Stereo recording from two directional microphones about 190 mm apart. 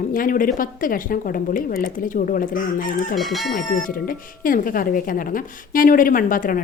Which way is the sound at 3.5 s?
45° left (ahead or behind).